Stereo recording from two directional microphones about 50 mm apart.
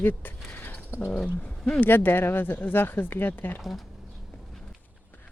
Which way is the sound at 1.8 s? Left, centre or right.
Left.